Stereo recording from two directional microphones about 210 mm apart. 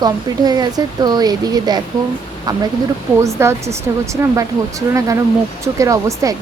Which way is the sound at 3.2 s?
15° right (ahead or behind).